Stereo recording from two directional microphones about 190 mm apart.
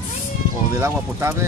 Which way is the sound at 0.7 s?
15° right (ahead or behind).